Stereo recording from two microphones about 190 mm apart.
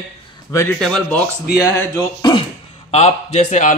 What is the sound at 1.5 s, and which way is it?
Speech, 15° left (ahead or behind).